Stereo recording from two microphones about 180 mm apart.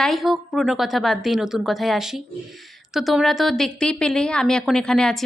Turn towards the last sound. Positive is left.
turn(degrees=0)  # may be behind; listen again after turning